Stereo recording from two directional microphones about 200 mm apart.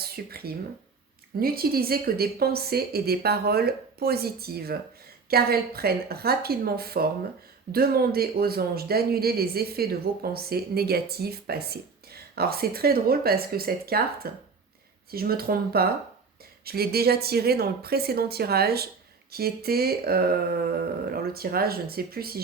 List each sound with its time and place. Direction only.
0.0 s speech: 50° right (ahead or behind)